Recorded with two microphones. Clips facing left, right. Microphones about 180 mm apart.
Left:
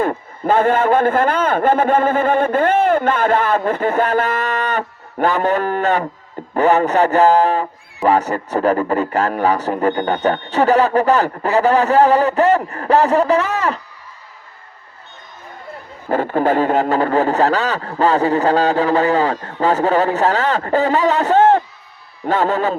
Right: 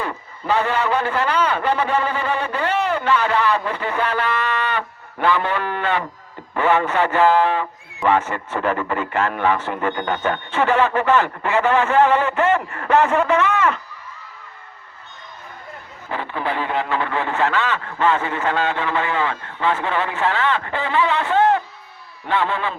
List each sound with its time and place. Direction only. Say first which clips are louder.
0.0 s a man's voice: left 8 dB; 50° left (ahead or behind)
16.0 s a man's voice: left 9 dB; 45° left (ahead or behind)